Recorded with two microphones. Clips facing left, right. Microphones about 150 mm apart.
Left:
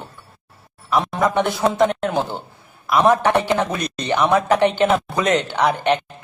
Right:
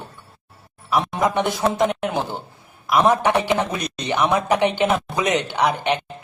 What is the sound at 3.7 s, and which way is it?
Speech, 10° right (ahead or behind).